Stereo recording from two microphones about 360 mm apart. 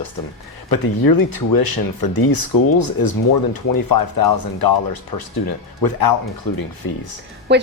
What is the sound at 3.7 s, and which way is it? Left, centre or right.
Speech, left.